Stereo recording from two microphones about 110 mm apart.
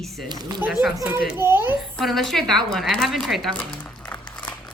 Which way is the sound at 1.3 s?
20° right (ahead or behind).